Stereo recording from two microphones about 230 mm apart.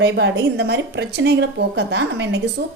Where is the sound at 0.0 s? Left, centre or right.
Right.